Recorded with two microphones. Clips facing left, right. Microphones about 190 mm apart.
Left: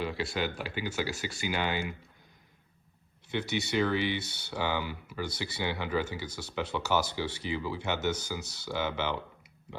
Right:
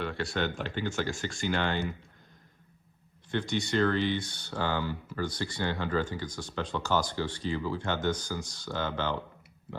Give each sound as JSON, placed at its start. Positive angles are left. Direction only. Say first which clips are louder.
{"t": 0.0, "sound": "speech", "louder": "right 1 dB", "side_deg": 0}
{"t": 3.3, "sound": "speech", "louder": "right 1 dB", "side_deg": 10}